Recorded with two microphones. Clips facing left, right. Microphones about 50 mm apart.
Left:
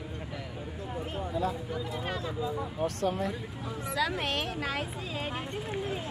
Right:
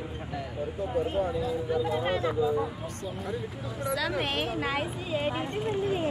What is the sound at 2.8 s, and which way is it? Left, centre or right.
Speech, left.